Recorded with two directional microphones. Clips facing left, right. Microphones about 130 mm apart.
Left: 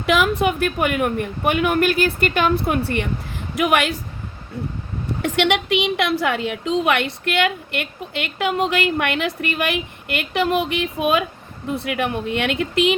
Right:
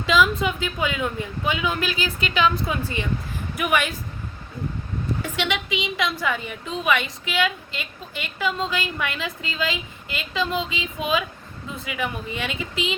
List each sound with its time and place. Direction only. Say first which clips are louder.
0.0 s a woman's voice: left 2 dB; 65° left (ahead or behind)
5.2 s a woman's voice: left 11 dB; 70° left (ahead or behind)